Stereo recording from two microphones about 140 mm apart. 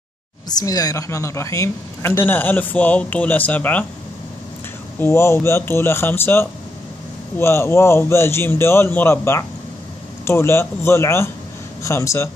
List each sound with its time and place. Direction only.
0.5 s speech: 25° left (ahead or behind); by 3.8 s 10° left (ahead or behind)
5.0 s speech: 20° left (ahead or behind)